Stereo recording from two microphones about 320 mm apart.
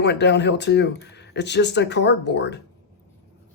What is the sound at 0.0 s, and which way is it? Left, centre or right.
Speech, left.